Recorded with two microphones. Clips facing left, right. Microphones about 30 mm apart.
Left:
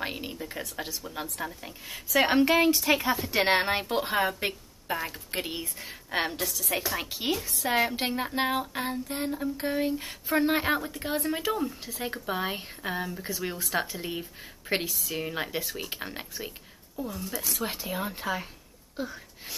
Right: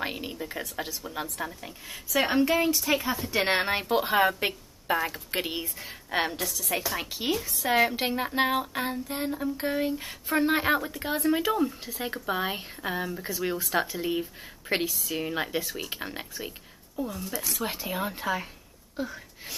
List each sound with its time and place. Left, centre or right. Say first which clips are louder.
0.0 s a sound: right 1 dB; centre
1.4 s speech: right 1 dB; centre
2.1 s speech: left 2 dB; left
2.5 s a woman's voice: left 2 dB; left
2.8 s speech: left 2 dB; centre
5.9 s a woman's voice: right 1 dB; centre